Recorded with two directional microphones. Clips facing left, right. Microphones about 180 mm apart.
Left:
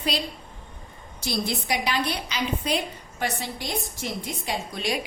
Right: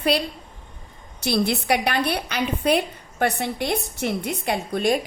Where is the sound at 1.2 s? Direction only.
65° right (ahead or behind).